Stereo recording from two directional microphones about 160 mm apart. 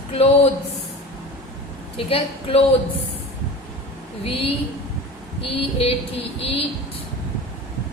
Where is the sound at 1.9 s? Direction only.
35° left (ahead or behind).